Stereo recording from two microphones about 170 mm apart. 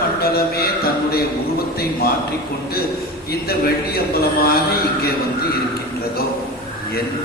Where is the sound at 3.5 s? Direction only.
65° left (ahead or behind).